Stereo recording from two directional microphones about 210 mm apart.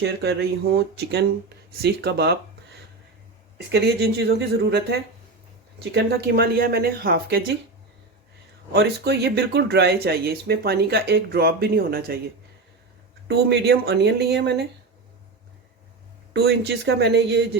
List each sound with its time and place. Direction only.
0.0 s speech: 55° right (ahead or behind)
3.7 s speech: 50° right (ahead or behind)
8.7 s speech: 55° right (ahead or behind)
13.2 s speech: 55° right (ahead or behind)
16.3 s speech: 50° right (ahead or behind)